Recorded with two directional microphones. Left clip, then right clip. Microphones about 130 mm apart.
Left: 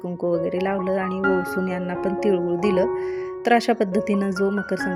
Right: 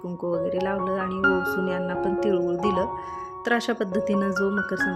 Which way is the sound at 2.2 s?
25° left (ahead or behind).